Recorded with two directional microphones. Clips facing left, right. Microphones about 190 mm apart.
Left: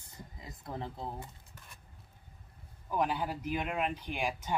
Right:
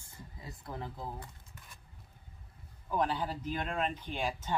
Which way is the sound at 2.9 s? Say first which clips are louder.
Even; 10° left (ahead or behind).